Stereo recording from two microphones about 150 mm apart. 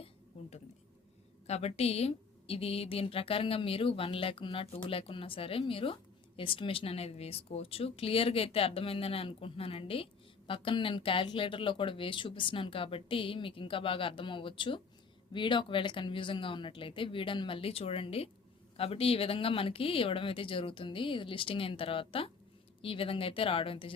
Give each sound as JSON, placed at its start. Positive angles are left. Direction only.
{"t": 1.5, "sound": "a woman's voice", "side_deg": 45}